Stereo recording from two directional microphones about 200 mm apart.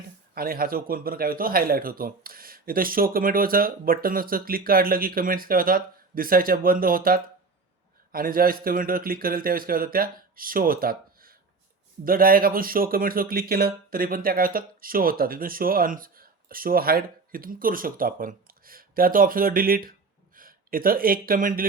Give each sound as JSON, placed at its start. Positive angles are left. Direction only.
{"t": 0.3, "sound": "speech", "side_deg": -45}